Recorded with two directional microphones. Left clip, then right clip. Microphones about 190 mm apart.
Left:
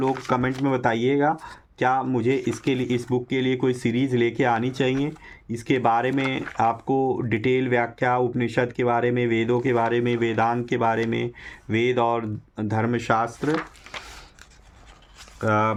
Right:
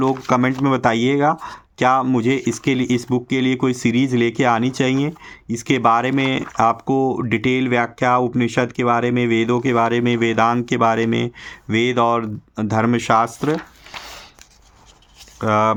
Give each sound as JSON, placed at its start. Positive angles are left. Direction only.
{"t": 0.0, "sound": "speech", "side_deg": -40}
{"t": 15.4, "sound": "speech", "side_deg": -35}